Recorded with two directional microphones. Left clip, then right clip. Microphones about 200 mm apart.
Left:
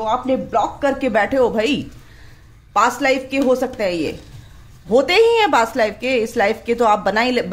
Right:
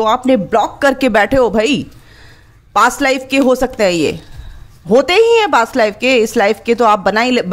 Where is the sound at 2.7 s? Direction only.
35° right (ahead or behind).